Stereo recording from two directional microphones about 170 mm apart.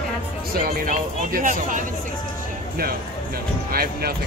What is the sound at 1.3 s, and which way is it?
Speech, 55° right (ahead or behind).